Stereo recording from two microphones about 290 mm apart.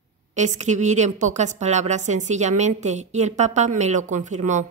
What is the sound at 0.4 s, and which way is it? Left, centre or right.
A woman's voice, right.